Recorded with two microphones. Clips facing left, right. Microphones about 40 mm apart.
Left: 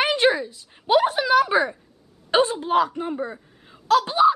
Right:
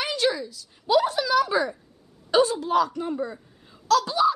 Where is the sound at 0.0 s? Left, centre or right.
Left.